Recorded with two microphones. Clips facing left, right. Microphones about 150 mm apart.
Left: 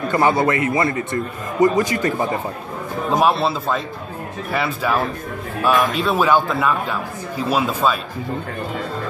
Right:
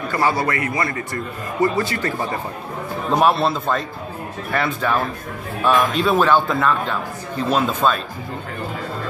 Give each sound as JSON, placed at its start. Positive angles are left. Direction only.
{"t": 0.1, "sound": "a man's voice", "side_deg": 20}
{"t": 3.1, "sound": "a man's voice", "side_deg": 0}